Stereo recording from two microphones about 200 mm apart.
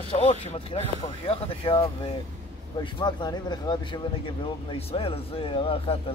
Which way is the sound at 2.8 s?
20° left (ahead or behind).